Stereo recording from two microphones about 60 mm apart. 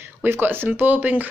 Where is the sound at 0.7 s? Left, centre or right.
Right.